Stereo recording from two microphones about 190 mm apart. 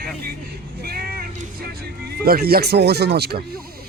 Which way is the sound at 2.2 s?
50° right (ahead or behind).